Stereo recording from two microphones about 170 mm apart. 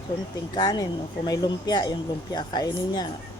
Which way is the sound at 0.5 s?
25° left (ahead or behind).